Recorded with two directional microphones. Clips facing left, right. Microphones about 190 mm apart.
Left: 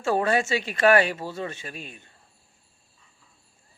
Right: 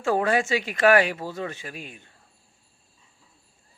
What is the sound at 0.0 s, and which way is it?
Speech, 15° right (ahead or behind).